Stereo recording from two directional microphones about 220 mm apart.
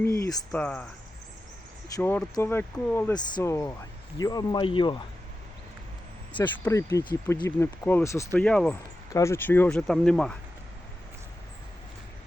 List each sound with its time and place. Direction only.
0.0 s speech: 15° left (ahead or behind)
0.5 s speech: 5° left (ahead or behind)
2.0 s speech: 10° left (ahead or behind)
3.2 s a man's voice: 20° left (ahead or behind)
6.4 s speech: 15° left (ahead or behind)
7.4 s speech: 10° left (ahead or behind)